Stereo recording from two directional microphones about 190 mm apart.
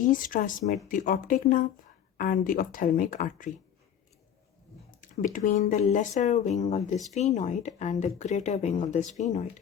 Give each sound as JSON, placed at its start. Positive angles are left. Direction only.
{"t": 0.0, "sound": "speech", "side_deg": 45}
{"t": 4.9, "sound": "speech", "side_deg": 45}